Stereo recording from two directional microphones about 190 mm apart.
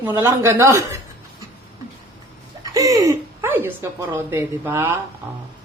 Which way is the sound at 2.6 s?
15° right (ahead or behind).